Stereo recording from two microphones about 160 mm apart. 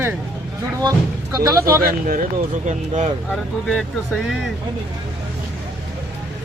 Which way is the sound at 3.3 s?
5° left (ahead or behind).